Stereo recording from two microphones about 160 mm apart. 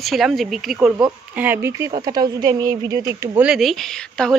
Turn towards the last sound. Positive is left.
turn(degrees=5)  # may be behind; listen again after turning